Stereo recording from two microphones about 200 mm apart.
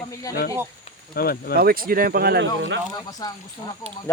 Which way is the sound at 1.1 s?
50° left (ahead or behind).